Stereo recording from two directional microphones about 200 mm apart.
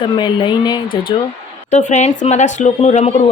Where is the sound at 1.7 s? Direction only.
35° left (ahead or behind).